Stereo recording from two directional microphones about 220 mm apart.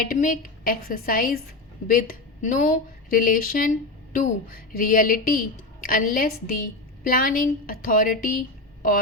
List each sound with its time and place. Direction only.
0.0 s a woman's voice: 40° left (ahead or behind)